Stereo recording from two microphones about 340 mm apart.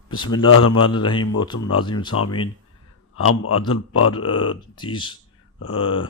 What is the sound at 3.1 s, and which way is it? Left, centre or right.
Speech, left.